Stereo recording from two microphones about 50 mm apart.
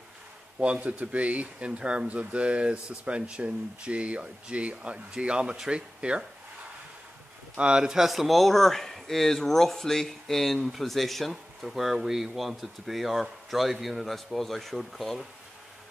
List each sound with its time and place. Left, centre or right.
0.6 s speech: right
7.5 s a man's voice: centre